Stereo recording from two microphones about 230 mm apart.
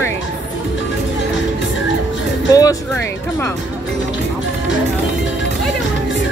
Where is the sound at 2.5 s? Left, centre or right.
Centre.